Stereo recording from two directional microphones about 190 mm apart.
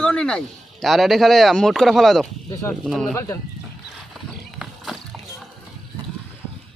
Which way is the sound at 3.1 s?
15° left (ahead or behind).